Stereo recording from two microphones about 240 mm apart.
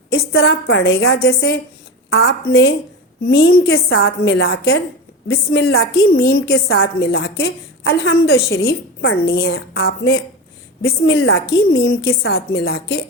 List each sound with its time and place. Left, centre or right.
0.1 s a woman's voice: left